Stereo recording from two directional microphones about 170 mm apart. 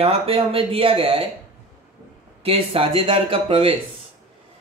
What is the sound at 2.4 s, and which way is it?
Speech, 35° right (ahead or behind).